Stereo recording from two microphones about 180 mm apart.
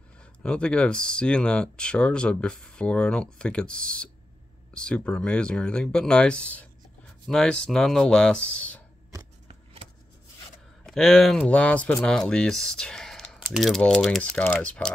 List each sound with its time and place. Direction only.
0.2 s speech: 5° left (ahead or behind)
10.9 s speech: centre (ahead or behind)